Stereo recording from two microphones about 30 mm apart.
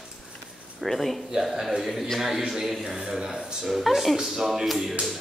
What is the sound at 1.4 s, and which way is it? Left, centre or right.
Speech, centre.